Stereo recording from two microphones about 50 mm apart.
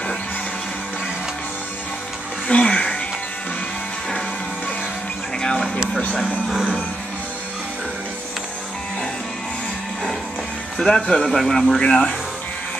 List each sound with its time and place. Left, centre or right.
2.4 s music: centre
5.4 s music: centre
10.8 s speech: centre
11.8 s speech: centre